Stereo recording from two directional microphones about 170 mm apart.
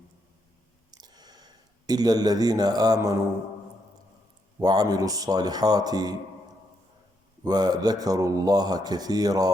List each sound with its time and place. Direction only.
0.9 s a sound: 25° right (ahead or behind)
1.9 s speech: 25° right (ahead or behind)
4.6 s speech: 20° right (ahead or behind)
7.4 s speech: 25° right (ahead or behind)